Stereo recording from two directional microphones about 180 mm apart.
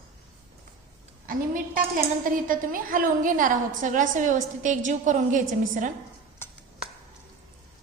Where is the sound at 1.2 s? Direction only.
50° right (ahead or behind).